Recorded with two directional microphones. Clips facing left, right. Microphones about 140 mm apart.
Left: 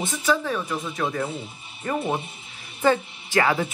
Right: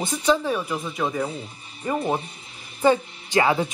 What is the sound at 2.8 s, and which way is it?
Speech, 20° right (ahead or behind).